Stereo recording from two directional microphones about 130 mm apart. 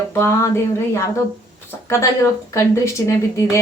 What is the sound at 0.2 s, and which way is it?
Speech, 20° left (ahead or behind).